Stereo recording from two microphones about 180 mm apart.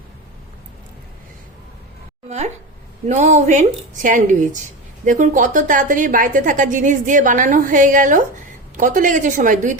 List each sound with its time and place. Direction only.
3.1 s a woman's voice: 40° right (ahead or behind)